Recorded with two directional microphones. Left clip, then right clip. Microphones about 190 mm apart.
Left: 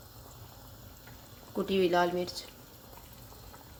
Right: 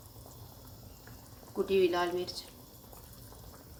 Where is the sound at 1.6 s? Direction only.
40° left (ahead or behind).